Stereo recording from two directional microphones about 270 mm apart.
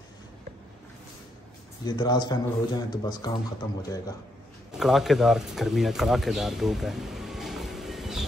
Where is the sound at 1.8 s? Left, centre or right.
Centre.